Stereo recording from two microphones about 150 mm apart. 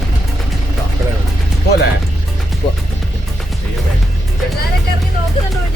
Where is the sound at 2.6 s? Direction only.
55° left (ahead or behind).